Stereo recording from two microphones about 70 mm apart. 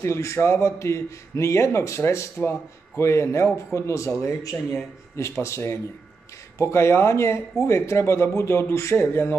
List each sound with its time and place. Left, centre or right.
0.0 s a man's voice: left